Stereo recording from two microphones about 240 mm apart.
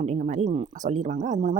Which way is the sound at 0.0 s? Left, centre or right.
Right.